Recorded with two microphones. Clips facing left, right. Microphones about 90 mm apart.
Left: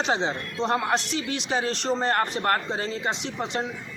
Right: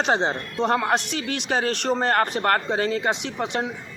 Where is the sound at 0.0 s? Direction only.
50° right (ahead or behind).